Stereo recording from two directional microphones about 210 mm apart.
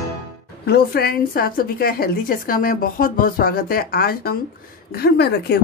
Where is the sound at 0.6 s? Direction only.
45° left (ahead or behind).